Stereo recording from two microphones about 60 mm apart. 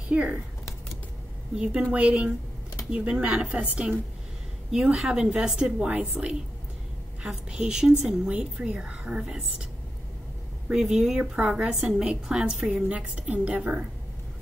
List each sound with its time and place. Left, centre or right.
0.1 s a woman's voice: right
1.5 s a woman's voice: centre
7.2 s a woman's voice: centre
10.7 s speech: centre
11.1 s a woman's voice: centre
11.6 s a woman's voice: centre
12.8 s a woman's voice: right